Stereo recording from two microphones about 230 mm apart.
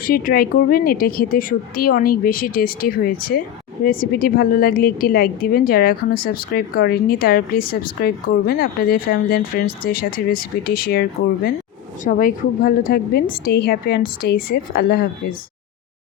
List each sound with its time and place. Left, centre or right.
0.0 s a woman's voice: left
12.0 s a woman's voice: left